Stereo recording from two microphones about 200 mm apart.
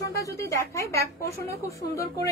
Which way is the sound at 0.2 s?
15° left (ahead or behind).